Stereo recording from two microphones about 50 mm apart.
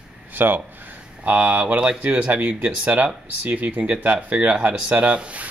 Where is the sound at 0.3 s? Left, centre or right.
Right.